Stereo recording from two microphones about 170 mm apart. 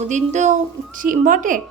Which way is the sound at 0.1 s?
45° right (ahead or behind).